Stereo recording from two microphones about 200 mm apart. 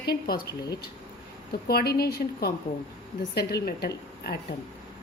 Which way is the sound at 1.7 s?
50° left (ahead or behind).